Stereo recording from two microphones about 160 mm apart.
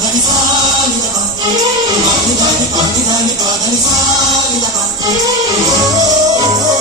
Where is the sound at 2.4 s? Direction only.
25° right (ahead or behind).